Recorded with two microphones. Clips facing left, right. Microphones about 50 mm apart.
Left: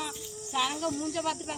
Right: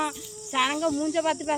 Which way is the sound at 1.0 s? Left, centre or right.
Right.